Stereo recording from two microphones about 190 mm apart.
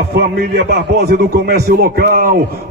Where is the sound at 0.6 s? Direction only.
60° right (ahead or behind).